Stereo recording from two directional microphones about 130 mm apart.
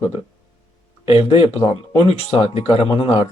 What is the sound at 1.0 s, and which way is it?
Speech, 50° left (ahead or behind).